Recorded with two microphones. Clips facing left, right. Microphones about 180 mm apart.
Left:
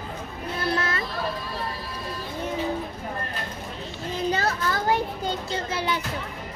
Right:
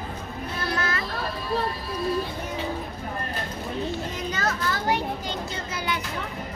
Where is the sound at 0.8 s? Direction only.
30° left (ahead or behind).